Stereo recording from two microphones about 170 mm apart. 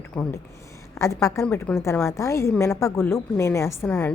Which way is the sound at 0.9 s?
20° left (ahead or behind).